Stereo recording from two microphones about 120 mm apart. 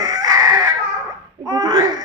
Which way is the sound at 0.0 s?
30° right (ahead or behind).